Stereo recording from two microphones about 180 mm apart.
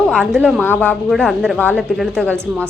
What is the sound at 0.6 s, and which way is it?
A woman's voice, 10° left (ahead or behind).